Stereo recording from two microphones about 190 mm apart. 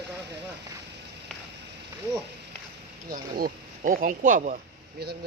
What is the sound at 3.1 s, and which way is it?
Speech, 50° right (ahead or behind).